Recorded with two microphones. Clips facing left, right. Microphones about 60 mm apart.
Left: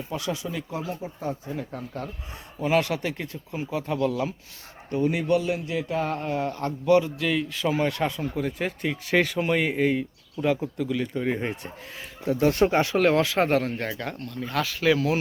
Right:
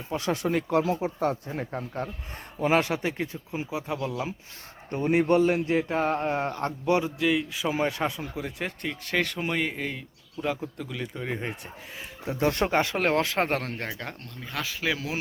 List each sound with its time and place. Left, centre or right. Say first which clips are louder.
0.3 s speech: right 7 dB; right
1.5 s a man's voice: even; right; by 4.4 s centre
4.9 s a man's voice: right 1 dB; right
7.2 s speech: even; centre
12.7 s a man's voice: left 3 dB; right
13.7 s speech: left 4 dB; centre